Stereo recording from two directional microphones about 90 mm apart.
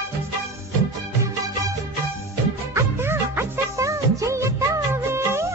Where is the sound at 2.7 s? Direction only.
25° right (ahead or behind).